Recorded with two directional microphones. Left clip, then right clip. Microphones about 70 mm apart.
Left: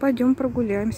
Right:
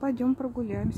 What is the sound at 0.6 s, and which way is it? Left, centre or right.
Speech, left.